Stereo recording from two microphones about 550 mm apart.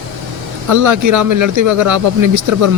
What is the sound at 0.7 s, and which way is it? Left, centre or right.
Speech, right.